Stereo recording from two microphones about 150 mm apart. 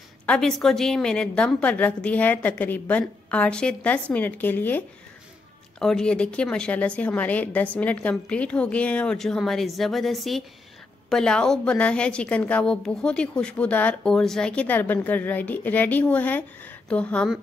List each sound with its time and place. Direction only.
0.3 s a woman's voice: 5° left (ahead or behind)